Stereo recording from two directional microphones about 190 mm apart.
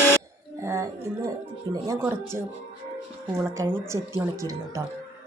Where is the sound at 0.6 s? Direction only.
15° right (ahead or behind).